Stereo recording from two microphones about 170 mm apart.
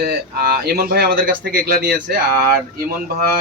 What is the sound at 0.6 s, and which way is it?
Speech, 65° right (ahead or behind).